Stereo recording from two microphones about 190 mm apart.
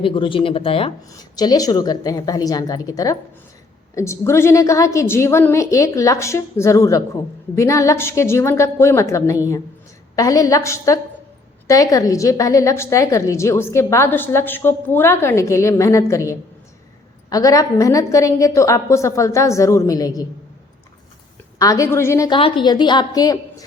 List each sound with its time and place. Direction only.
0.0 s a woman's voice: 25° left (ahead or behind)
21.6 s a woman's voice: 15° left (ahead or behind)
22.4 s a woman's voice: 25° left (ahead or behind)